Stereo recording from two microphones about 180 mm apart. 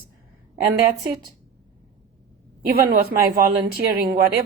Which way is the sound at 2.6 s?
55° right (ahead or behind).